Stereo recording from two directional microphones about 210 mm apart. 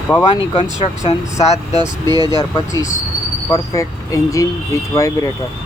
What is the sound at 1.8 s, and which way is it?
Speech, 20° right (ahead or behind).